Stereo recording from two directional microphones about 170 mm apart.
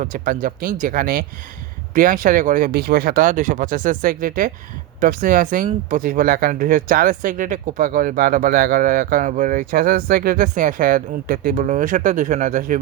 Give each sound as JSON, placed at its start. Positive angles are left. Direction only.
{"t": 0.0, "sound": "speech", "side_deg": -55}